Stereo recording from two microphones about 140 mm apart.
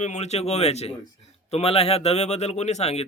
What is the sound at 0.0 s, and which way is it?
Speech, 55° left (ahead or behind).